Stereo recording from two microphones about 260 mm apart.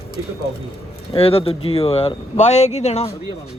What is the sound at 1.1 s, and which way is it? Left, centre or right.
Speech, left.